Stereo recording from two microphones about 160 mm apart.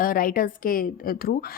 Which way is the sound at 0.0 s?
60° left (ahead or behind).